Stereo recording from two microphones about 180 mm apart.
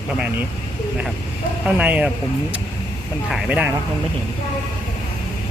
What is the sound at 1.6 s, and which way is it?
Speech, 5° right (ahead or behind).